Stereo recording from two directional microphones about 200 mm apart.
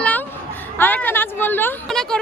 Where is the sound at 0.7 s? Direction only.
10° left (ahead or behind).